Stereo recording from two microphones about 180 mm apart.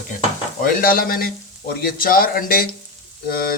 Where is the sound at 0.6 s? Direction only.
55° left (ahead or behind).